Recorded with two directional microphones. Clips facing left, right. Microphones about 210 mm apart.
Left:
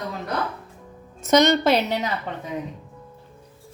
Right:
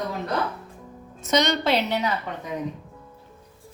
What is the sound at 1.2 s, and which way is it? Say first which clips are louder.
Speech: left 5 dB; 45° left (ahead or behind).